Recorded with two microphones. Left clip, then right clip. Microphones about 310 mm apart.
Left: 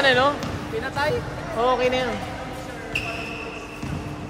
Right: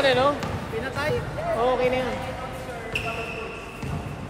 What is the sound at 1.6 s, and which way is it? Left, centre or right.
Speech, left.